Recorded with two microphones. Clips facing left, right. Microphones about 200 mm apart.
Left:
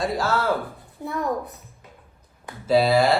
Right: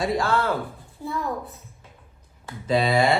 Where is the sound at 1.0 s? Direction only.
20° left (ahead or behind).